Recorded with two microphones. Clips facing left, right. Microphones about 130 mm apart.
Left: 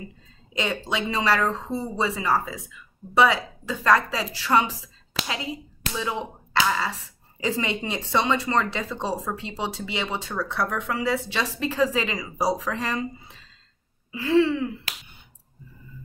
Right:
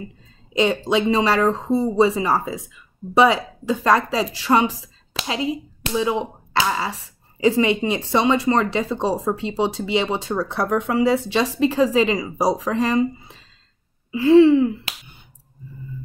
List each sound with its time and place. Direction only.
0.5 s speech: 25° right (ahead or behind)